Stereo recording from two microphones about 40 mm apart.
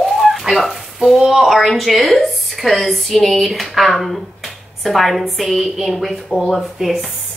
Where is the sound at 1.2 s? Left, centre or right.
Centre.